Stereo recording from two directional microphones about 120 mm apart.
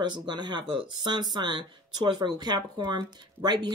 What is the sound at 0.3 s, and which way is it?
Speech, 40° right (ahead or behind).